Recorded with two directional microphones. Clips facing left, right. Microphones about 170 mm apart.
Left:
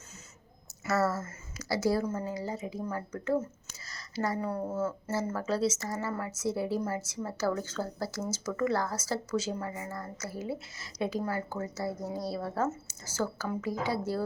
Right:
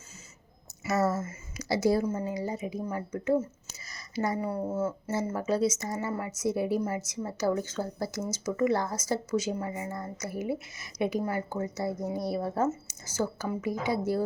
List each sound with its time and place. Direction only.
0.9 s speech: 20° right (ahead or behind)